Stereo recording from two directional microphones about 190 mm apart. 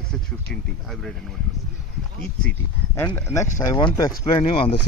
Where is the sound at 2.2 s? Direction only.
10° left (ahead or behind).